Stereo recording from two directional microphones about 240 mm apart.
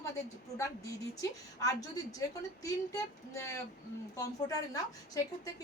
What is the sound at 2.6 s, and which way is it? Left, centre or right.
A woman's voice, centre.